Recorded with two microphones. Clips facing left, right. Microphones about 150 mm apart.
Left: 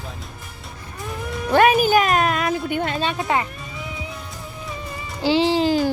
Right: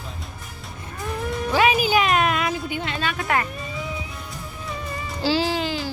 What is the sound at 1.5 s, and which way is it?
Speech, 50° left (ahead or behind).